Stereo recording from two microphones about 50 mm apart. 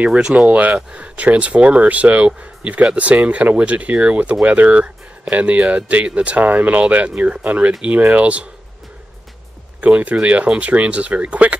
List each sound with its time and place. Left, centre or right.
0.0 s speech: right
9.8 s speech: right